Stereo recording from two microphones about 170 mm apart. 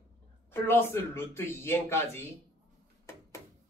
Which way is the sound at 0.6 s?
15° left (ahead or behind).